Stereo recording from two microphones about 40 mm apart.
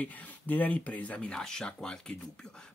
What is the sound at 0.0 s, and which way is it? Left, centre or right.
Speech, left.